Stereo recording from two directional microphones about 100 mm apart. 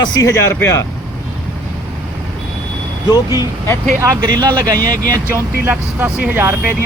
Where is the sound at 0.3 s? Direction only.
30° left (ahead or behind).